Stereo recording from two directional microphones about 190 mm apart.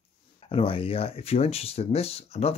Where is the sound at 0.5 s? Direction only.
30° left (ahead or behind).